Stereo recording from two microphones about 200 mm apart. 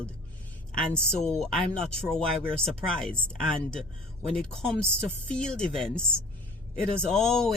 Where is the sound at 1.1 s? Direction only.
5° left (ahead or behind).